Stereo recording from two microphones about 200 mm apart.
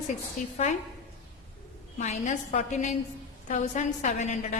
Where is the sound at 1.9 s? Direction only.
35° left (ahead or behind).